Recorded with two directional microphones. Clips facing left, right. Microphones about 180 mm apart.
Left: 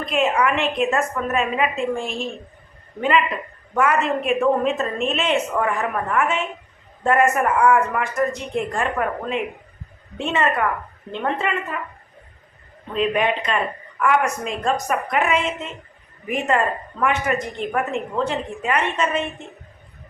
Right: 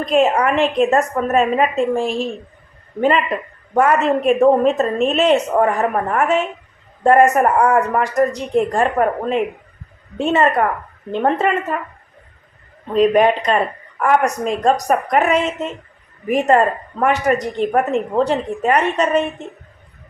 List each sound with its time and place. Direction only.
0.0 s a woman's voice: 40° right (ahead or behind)
12.9 s speech: 40° right (ahead or behind)